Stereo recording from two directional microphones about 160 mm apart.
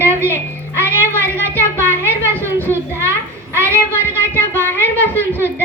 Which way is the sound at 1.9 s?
15° right (ahead or behind).